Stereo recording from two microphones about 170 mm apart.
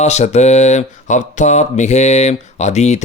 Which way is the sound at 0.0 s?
40° left (ahead or behind).